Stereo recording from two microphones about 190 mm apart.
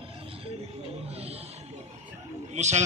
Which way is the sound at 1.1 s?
30° right (ahead or behind).